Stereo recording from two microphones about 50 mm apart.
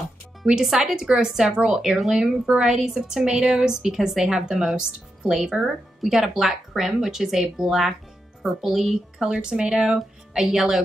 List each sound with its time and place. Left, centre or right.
0.6 s a woman's voice: centre
9.4 s a woman's voice: centre